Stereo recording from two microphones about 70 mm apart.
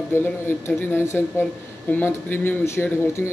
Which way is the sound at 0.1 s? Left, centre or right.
Left.